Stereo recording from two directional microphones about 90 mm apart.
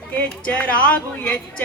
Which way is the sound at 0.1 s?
15° left (ahead or behind).